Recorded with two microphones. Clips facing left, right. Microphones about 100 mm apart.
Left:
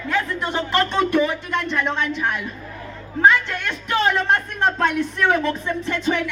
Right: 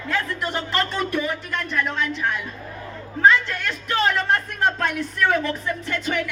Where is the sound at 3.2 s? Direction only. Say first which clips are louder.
Left 1 dB; 20° left (ahead or behind).